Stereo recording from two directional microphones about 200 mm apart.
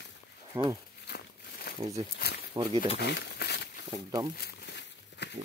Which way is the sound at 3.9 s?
20° right (ahead or behind).